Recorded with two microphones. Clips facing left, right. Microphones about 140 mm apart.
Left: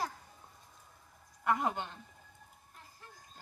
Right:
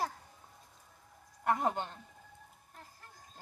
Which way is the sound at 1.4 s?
40° right (ahead or behind).